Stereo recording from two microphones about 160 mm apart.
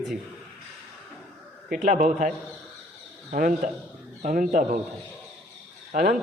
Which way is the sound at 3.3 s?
55° right (ahead or behind).